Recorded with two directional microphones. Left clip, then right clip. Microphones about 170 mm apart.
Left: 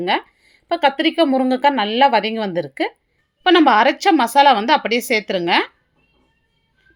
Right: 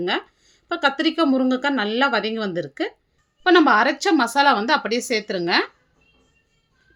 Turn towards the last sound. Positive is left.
turn(degrees=15)  # may be behind; listen again after turning